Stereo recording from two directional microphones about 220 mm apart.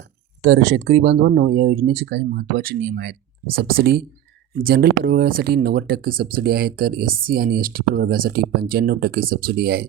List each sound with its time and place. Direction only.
0.5 s speech: 45° right (ahead or behind)